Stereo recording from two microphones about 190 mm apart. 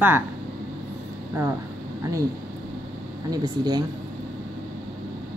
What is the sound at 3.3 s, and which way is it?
Speech, 20° right (ahead or behind).